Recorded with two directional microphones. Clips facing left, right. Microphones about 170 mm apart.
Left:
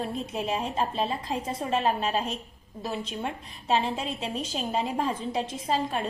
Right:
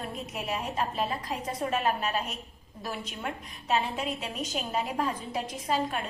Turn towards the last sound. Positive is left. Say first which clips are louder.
# left 2 dB
turn(degrees=30)  # may be behind; listen again after turning